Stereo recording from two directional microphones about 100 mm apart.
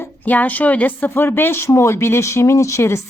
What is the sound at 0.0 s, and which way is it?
Speech, 15° left (ahead or behind).